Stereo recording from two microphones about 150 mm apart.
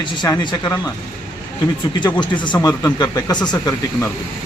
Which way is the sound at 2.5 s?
20° left (ahead or behind).